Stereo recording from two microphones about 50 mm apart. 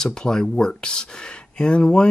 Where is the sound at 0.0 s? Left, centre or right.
Centre.